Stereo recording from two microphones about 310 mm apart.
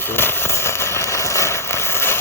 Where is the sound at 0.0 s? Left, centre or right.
Centre.